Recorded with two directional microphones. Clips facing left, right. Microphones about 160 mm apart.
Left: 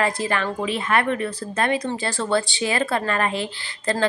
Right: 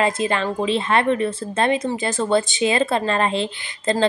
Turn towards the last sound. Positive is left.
turn(degrees=-25)  # may be behind; listen again after turning